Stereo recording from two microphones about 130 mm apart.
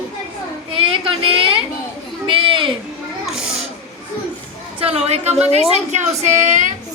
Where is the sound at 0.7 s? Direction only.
45° right (ahead or behind).